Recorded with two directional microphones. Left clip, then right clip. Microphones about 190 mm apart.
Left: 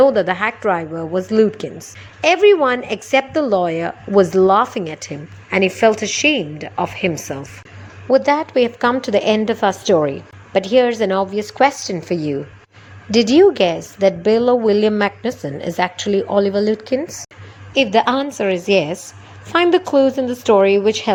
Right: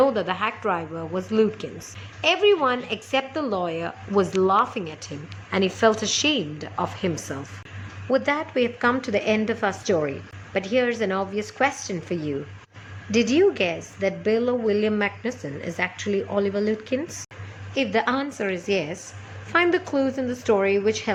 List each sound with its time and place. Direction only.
0.0 s a woman's voice: 25° left (ahead or behind)